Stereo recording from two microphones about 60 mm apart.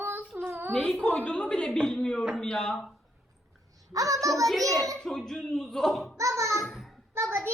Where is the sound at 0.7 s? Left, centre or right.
Centre.